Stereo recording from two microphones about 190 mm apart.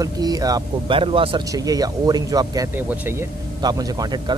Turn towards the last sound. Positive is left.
turn(degrees=-20)  # may be behind; listen again after turning